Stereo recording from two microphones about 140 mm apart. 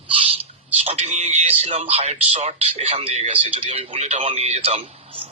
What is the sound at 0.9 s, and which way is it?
Speech, 50° right (ahead or behind).